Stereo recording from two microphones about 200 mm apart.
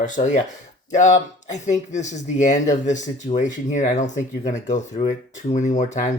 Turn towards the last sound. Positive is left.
turn(degrees=40)  # may be behind; listen again after turning